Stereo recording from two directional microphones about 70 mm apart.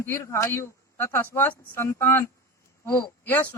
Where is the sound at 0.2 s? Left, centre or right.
Left.